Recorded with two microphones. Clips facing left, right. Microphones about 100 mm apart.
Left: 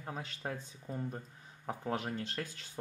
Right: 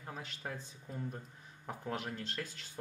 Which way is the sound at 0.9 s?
25° left (ahead or behind).